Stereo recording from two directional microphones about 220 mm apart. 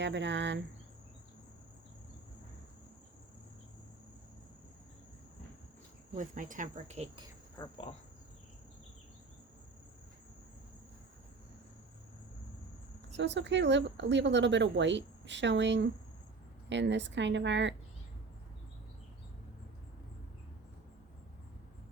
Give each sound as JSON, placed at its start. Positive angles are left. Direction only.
{"t": 0.0, "sound": "a woman's voice", "side_deg": -55}
{"t": 6.1, "sound": "speech", "side_deg": -35}
{"t": 7.5, "sound": "speech", "side_deg": 15}
{"t": 13.1, "sound": "a woman's voice", "side_deg": -55}